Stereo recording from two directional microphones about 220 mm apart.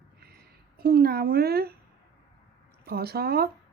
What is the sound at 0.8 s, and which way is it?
Speech, 45° right (ahead or behind).